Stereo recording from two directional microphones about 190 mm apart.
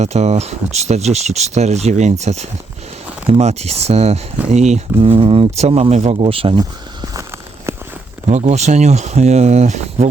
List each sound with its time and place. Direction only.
0.0 s speech: 35° right (ahead or behind); by 7.3 s 20° right (ahead or behind)
7.7 s walk: 15° right (ahead or behind)
8.3 s speech: 35° right (ahead or behind)